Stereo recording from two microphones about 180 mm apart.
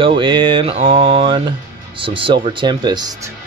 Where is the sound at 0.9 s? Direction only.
30° right (ahead or behind).